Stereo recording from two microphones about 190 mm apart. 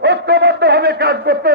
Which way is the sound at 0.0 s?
60° right (ahead or behind).